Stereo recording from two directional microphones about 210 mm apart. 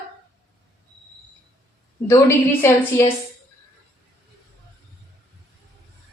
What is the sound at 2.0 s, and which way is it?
A woman's voice, 15° left (ahead or behind).